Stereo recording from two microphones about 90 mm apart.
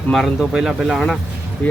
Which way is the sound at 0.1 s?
Centre (ahead or behind).